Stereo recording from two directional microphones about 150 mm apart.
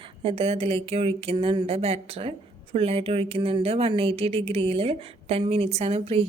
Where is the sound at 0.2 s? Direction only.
40° right (ahead or behind).